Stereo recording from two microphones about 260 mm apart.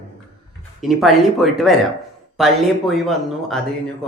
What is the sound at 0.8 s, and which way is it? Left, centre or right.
A man's voice, centre.